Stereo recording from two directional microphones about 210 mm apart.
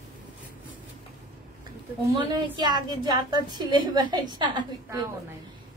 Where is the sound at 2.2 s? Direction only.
20° right (ahead or behind).